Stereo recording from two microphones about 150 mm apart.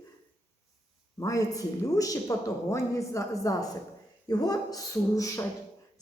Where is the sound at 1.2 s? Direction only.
20° left (ahead or behind).